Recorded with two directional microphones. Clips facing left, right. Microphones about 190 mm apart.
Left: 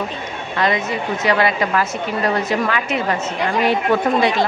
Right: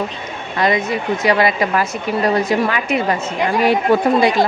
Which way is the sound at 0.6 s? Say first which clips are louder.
Right 2 dB; 10° right (ahead or behind).